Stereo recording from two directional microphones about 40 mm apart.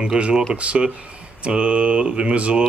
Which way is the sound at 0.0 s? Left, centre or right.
Right.